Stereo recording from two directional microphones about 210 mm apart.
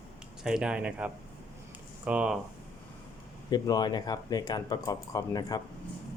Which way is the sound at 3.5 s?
20° left (ahead or behind).